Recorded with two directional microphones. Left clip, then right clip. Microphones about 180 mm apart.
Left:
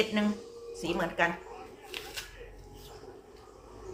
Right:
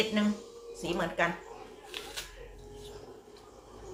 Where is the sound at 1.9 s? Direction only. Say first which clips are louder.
Even; 10° left (ahead or behind).